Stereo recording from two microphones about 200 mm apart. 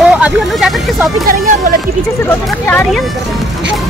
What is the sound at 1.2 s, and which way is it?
Speech, 40° right (ahead or behind).